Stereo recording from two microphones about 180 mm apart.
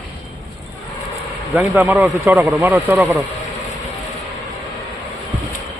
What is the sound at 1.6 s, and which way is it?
Speech, 10° right (ahead or behind).